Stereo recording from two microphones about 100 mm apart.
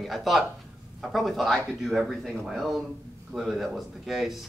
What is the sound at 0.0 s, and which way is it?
Speech, centre (ahead or behind).